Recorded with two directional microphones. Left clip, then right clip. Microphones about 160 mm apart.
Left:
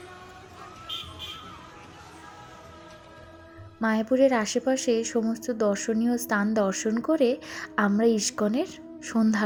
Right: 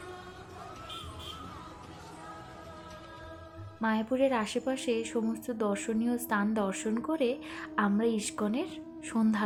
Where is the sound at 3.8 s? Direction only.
30° left (ahead or behind).